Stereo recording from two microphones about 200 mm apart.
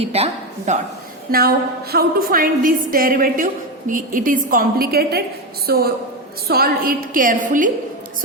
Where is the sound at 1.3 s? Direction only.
50° right (ahead or behind).